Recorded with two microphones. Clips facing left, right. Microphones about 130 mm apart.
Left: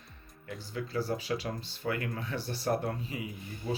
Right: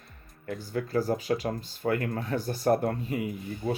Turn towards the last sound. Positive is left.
turn(degrees=-55)  # may be behind; listen again after turning